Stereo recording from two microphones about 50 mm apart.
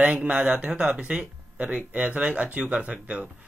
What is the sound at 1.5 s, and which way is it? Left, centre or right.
Speech, right.